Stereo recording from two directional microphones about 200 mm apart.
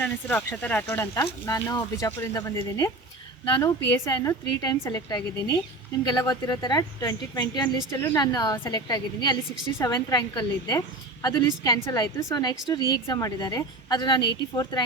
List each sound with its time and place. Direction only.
0.0 s a woman's voice: 5° left (ahead or behind)